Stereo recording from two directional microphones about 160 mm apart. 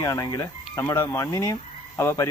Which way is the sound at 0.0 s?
20° left (ahead or behind).